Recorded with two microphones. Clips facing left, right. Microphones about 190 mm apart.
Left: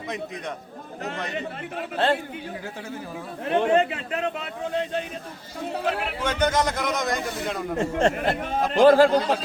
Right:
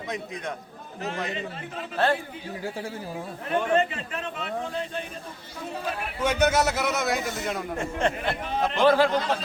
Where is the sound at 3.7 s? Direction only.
65° left (ahead or behind).